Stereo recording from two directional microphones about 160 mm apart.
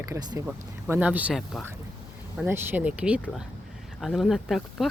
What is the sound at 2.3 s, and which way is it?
Speech, 15° right (ahead or behind).